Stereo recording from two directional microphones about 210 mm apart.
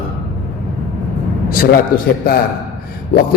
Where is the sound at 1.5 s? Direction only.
45° left (ahead or behind).